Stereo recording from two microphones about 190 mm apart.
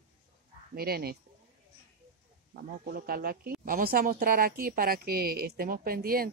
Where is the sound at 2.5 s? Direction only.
55° right (ahead or behind).